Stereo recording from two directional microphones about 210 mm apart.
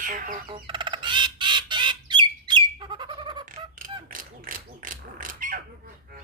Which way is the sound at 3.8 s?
40° right (ahead or behind).